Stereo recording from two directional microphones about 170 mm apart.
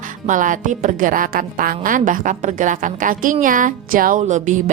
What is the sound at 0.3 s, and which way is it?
A woman's voice, 50° right (ahead or behind).